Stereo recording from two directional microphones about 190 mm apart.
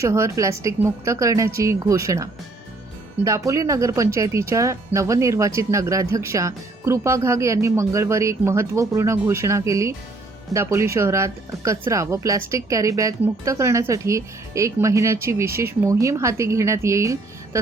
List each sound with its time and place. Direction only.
0.0 s speech: 15° right (ahead or behind)